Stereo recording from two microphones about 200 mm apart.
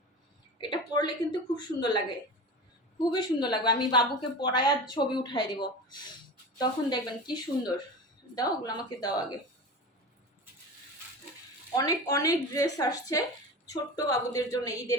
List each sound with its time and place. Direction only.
0.6 s speech: 20° left (ahead or behind)
3.1 s speech: 20° left (ahead or behind)
11.8 s speech: 20° left (ahead or behind)